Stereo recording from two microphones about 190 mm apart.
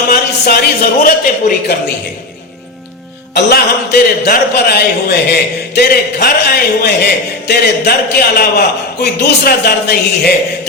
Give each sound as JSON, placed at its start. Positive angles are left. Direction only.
{"t": 0.1, "sound": "a man's voice", "side_deg": 55}
{"t": 3.3, "sound": "a man's voice", "side_deg": 60}